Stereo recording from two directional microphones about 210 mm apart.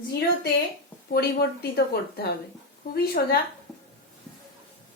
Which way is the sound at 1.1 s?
50° left (ahead or behind).